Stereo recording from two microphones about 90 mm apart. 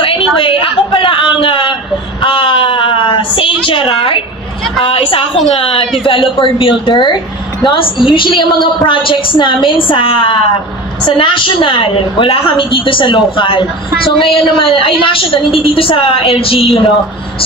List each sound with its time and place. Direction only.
0.0 s a sound: 80° left
4.8 s a woman's voice: 90° left; by 14.3 s 70° left (ahead or behind)
14.6 s a woman's voice: 80° left